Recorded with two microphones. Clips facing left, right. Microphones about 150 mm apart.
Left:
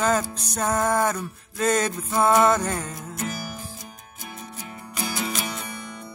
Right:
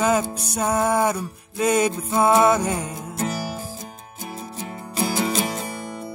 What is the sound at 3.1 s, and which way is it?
Music, 30° right (ahead or behind).